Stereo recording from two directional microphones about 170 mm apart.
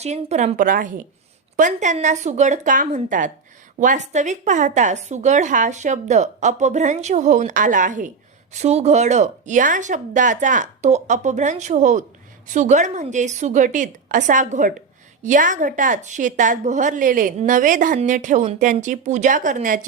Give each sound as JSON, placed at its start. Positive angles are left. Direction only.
{"t": 0.0, "sound": "a woman's voice", "side_deg": -40}